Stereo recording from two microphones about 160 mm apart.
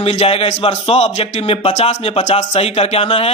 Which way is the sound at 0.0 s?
40° left (ahead or behind).